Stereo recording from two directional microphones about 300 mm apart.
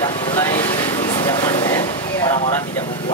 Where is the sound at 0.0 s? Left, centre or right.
Centre.